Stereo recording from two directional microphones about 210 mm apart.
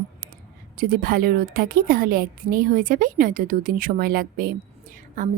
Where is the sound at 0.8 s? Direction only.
45° right (ahead or behind).